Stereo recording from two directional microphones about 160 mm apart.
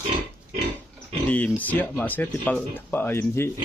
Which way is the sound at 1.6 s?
10° left (ahead or behind).